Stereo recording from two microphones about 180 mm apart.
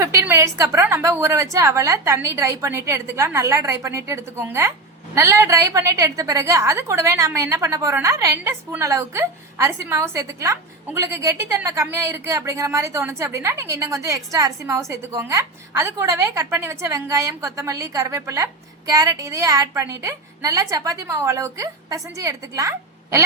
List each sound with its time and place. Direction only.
0.0 s a woman's voice: 15° right (ahead or behind)